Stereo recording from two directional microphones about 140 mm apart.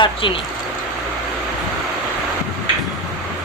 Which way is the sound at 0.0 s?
35° left (ahead or behind).